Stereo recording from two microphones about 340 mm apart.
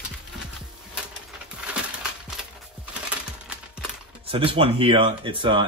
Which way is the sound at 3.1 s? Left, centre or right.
Centre.